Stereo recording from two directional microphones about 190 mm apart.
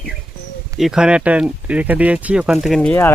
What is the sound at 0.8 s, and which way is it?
Speech, 5° right (ahead or behind).